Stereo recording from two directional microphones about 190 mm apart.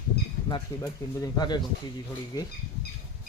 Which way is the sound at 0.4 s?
20° left (ahead or behind).